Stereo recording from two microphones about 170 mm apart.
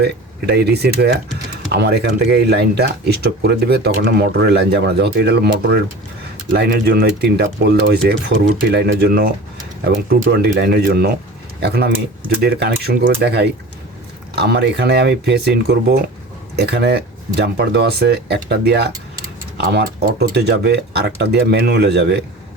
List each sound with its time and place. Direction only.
0.0 s speech: 75° right (ahead or behind)
10.3 s speech: 70° right (ahead or behind)